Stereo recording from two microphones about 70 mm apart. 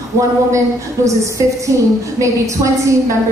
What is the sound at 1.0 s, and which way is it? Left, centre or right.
A woman's voice, right.